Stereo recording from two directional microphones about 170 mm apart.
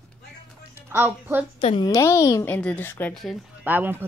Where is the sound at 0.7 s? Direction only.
15° right (ahead or behind).